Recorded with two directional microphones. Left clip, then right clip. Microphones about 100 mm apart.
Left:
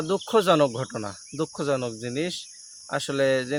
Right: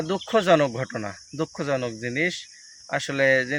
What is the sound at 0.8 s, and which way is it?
Speech, 35° left (ahead or behind).